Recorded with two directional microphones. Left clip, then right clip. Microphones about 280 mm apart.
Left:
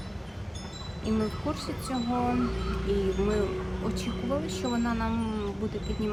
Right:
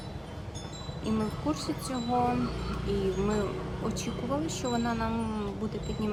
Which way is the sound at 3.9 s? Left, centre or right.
Centre.